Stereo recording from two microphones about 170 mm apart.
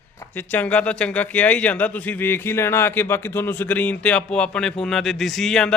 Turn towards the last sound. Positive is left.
turn(degrees=5)  # may be behind; listen again after turning